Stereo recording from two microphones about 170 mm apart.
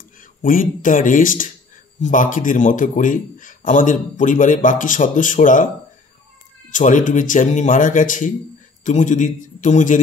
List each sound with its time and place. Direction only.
0.2 s speech: 55° left (ahead or behind)
6.7 s speech: 50° left (ahead or behind)